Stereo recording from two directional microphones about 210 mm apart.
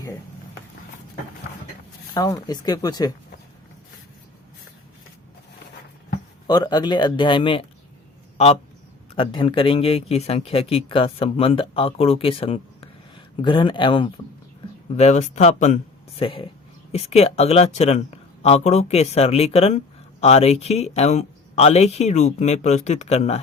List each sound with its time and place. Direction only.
2.1 s speech: 15° left (ahead or behind)
6.5 s speech: 20° left (ahead or behind)
9.1 s speech: 25° left (ahead or behind)
14.9 s speech: 35° left (ahead or behind)